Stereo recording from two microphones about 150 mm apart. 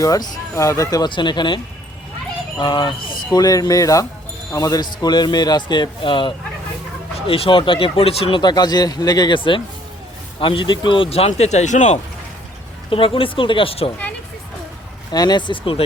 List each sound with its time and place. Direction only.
0.0 s speech: 20° left (ahead or behind); by 11.9 s 50° left (ahead or behind)
12.9 s speech: 35° left (ahead or behind)
15.1 s speech: 25° left (ahead or behind)